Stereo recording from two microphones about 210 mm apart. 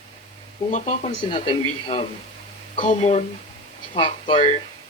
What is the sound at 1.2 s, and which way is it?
Speech, 25° left (ahead or behind).